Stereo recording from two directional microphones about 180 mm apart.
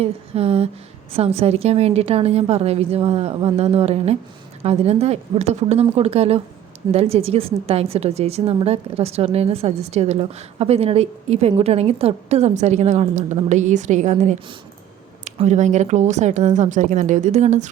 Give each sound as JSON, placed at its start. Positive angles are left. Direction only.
{"t": 0.0, "sound": "a woman's voice", "side_deg": -35}